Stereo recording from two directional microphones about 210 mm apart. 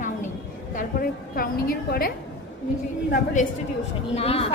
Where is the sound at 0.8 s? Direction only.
40° left (ahead or behind).